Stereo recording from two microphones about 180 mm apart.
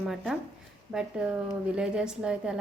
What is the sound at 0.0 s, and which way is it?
A woman's voice, centre (ahead or behind).